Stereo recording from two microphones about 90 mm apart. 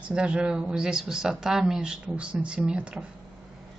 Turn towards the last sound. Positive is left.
turn(degrees=-10)  # may be behind; listen again after turning